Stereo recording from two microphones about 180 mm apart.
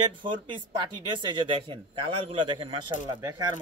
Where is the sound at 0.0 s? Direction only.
25° right (ahead or behind).